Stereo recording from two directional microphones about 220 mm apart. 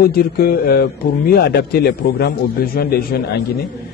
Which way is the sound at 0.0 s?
45° left (ahead or behind).